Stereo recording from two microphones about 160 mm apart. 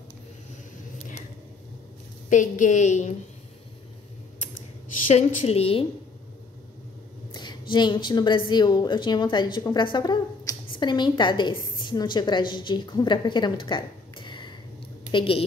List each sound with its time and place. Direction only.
2.2 s a woman's voice: 50° left (ahead or behind)
5.0 s a woman's voice: 45° left (ahead or behind)
7.7 s a woman's voice: 30° left (ahead or behind)